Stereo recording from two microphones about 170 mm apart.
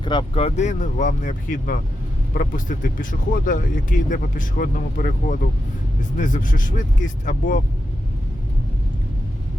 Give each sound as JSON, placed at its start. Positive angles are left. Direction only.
{"t": 0.0, "sound": "speech", "side_deg": 25}